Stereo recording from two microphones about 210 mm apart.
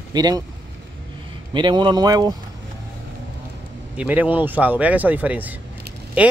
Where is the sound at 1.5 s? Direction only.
20° right (ahead or behind).